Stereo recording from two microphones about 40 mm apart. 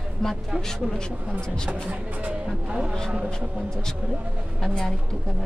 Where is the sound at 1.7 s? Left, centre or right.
Right.